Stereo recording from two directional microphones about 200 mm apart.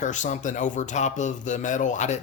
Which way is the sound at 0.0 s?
40° left (ahead or behind).